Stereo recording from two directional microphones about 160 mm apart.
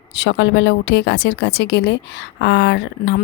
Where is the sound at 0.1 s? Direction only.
90° left.